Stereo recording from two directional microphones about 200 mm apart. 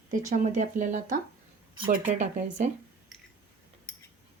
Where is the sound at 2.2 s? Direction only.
35° right (ahead or behind).